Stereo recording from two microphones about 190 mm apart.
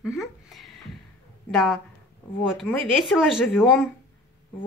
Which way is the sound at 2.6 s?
Centre (ahead or behind).